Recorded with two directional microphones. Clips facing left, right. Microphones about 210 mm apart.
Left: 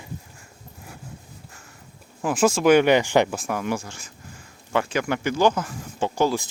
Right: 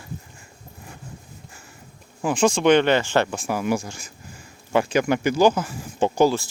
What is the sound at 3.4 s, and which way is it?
Speech, 5° right (ahead or behind).